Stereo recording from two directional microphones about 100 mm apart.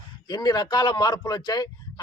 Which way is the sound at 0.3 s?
45° left (ahead or behind).